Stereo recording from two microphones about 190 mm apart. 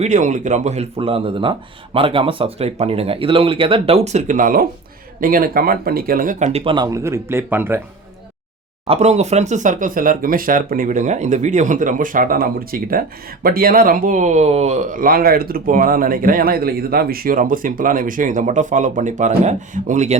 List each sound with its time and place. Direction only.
0.0 s speech: 40° right (ahead or behind)
6.7 s speech: 20° right (ahead or behind)
8.9 s speech: 35° right (ahead or behind)